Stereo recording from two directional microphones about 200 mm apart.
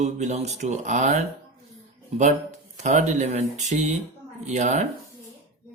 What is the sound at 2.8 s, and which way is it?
Speech, 35° right (ahead or behind).